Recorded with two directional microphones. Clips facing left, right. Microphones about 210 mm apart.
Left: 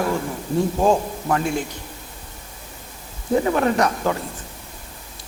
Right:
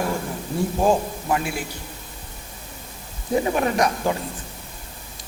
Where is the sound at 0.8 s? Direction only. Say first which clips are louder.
Right 2 dB; 10° right (ahead or behind).